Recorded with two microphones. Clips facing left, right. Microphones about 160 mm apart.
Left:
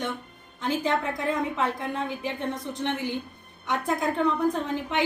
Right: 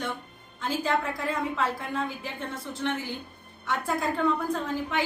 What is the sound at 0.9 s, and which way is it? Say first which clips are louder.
A woman's voice: left 1 dB; 20° left (ahead or behind).